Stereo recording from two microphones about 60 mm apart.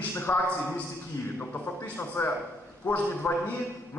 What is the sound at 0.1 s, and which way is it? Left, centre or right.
Speech, left.